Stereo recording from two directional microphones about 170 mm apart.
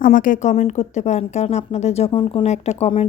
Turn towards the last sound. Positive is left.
turn(degrees=35)  # may be behind; listen again after turning